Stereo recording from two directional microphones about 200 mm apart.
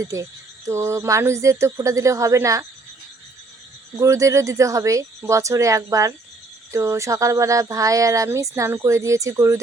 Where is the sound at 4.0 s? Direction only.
15° right (ahead or behind).